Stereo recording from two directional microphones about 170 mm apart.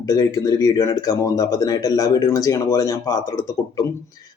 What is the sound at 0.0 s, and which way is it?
Speech, 20° left (ahead or behind).